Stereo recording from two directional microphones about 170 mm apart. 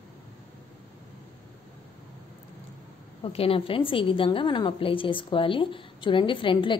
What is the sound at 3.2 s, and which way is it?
A woman's voice, 35° left (ahead or behind).